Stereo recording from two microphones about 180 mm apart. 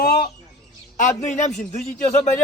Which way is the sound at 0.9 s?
45° left (ahead or behind).